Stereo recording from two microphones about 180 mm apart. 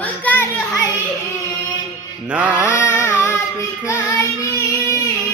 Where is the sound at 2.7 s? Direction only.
15° left (ahead or behind).